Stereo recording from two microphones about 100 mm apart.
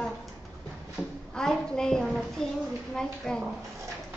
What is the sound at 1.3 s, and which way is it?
A woman's voice, 5° left (ahead or behind).